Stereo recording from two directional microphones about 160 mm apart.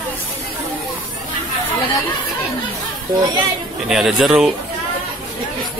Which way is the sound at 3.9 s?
Centre (ahead or behind).